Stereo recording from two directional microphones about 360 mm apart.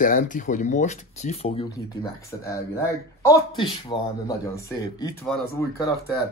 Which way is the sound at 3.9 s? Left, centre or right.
Centre.